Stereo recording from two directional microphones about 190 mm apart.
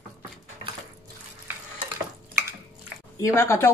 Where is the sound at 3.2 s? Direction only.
15° left (ahead or behind).